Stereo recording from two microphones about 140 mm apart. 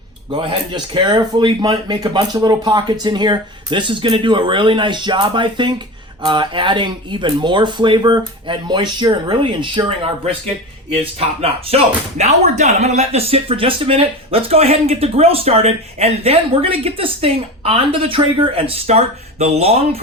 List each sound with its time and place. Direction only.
0.3 s speech: 35° right (ahead or behind)
11.3 s speech: 45° right (ahead or behind)